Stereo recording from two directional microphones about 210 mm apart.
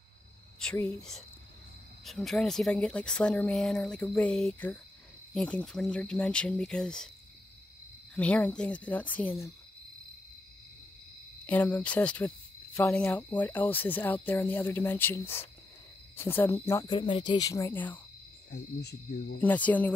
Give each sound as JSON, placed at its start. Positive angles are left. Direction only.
{"t": 0.6, "sound": "speech", "side_deg": 5}
{"t": 8.1, "sound": "speech", "side_deg": 5}
{"t": 11.4, "sound": "speech", "side_deg": 10}
{"t": 18.5, "sound": "speech", "side_deg": 55}
{"t": 19.4, "sound": "speech", "side_deg": 5}